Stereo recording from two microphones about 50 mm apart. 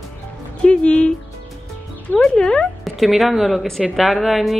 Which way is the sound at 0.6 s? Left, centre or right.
Left.